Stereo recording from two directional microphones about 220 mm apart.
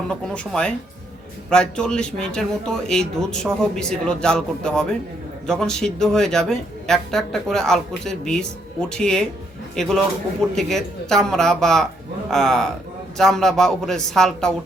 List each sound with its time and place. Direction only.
0.1 s a woman's voice: 5° left (ahead or behind)